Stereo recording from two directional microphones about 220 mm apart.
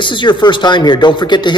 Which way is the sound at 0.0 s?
20° left (ahead or behind).